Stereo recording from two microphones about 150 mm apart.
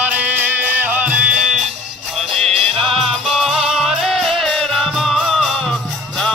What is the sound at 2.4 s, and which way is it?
Music, 40° right (ahead or behind).